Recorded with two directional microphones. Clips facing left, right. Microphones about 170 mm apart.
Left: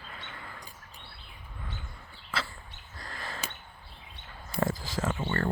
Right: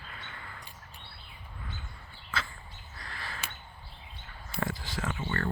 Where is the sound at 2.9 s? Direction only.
40° left (ahead or behind).